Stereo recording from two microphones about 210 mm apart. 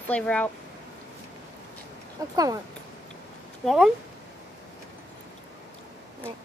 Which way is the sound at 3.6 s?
5° right (ahead or behind).